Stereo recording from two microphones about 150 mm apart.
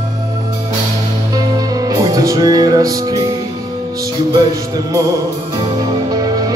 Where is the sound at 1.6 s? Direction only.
25° right (ahead or behind).